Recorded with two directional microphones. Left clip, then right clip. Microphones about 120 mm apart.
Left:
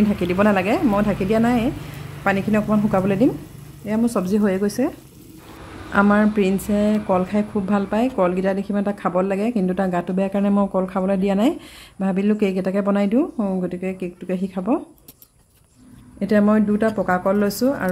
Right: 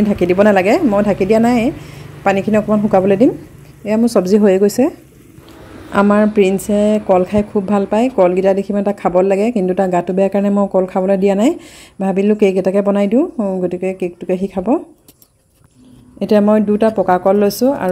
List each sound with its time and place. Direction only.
0.1 s speech: 35° right (ahead or behind)
3.8 s speech: 45° right (ahead or behind)
5.9 s speech: 30° right (ahead or behind)
13.2 s speech: 15° right (ahead or behind)
13.7 s speech: 30° right (ahead or behind)
16.2 s speech: 25° right (ahead or behind)